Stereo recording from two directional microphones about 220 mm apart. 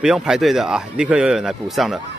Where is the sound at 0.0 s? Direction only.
5° right (ahead or behind).